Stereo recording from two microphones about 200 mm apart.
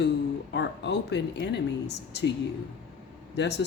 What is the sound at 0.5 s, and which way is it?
Speech, 60° left (ahead or behind).